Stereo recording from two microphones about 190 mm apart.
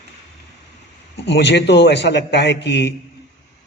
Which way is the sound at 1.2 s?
65° left (ahead or behind).